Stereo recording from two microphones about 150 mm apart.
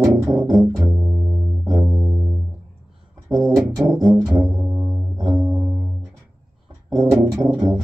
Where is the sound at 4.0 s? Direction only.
20° right (ahead or behind).